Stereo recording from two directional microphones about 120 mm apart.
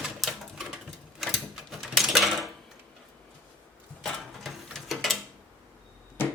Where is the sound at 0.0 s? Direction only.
Centre (ahead or behind).